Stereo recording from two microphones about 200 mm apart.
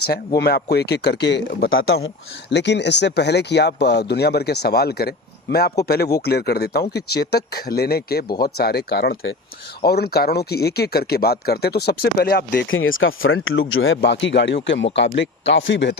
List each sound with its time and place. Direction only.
0.3 s speech: 55° left (ahead or behind); by 2.0 s 75° left (ahead or behind)
2.5 s speech: 60° left (ahead or behind)
12.6 s speech: 80° left; by 16.0 s 65° left (ahead or behind)